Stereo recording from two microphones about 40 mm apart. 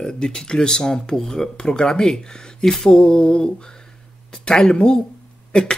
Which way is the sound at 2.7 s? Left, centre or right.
Centre.